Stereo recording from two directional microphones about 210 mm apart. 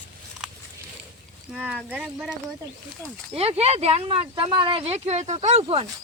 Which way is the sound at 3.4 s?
30° right (ahead or behind).